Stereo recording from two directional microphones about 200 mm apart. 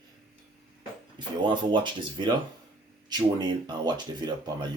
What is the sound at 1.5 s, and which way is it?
Speech, 25° right (ahead or behind).